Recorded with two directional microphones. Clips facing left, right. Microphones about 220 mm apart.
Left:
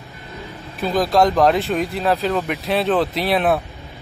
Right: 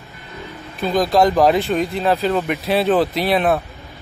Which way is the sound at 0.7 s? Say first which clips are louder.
Right 1 dB; centre (ahead or behind).